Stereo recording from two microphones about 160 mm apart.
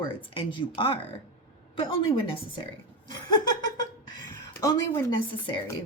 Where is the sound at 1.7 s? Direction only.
30° left (ahead or behind).